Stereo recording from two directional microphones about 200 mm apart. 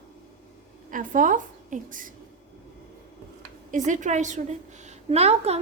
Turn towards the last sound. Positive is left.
turn(degrees=-30)  # may be behind; listen again after turning